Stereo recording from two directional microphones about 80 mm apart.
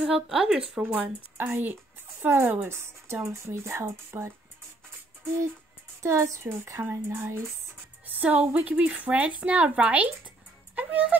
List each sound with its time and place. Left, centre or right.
0.0 s speech: centre
1.4 s speech: right
6.0 s speech: right
8.1 s speech: centre